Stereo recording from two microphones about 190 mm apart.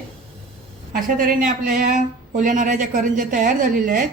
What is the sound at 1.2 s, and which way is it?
Speech, 50° right (ahead or behind).